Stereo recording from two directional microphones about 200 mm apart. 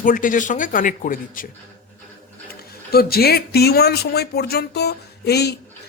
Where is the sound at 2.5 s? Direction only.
50° left (ahead or behind).